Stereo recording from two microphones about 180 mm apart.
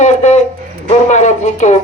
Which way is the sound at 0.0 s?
40° left (ahead or behind).